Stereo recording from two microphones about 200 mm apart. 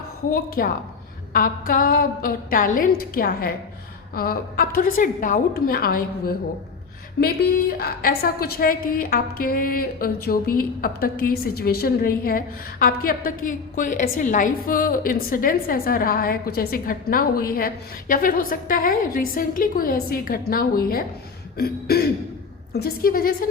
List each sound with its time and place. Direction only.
0.3 s a woman's voice: 45° left (ahead or behind)